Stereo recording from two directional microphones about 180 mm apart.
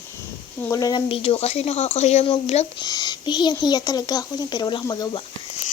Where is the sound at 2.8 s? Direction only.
25° left (ahead or behind).